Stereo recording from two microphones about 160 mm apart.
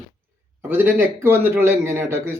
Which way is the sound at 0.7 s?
15° right (ahead or behind).